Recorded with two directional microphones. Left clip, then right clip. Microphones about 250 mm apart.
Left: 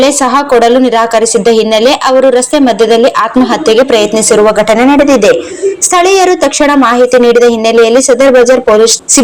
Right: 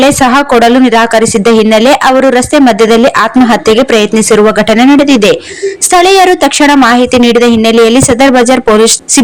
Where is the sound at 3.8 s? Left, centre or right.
Right.